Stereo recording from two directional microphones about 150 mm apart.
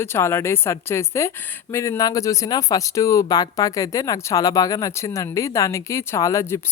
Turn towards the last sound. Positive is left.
turn(degrees=20)  # may be behind; listen again after turning